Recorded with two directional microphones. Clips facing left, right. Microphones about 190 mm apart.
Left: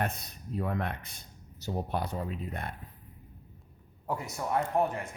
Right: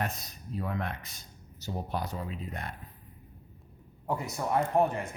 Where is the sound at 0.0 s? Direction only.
55° left (ahead or behind).